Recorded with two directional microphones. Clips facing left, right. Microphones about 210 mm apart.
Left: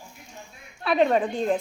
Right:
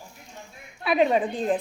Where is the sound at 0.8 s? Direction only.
5° right (ahead or behind).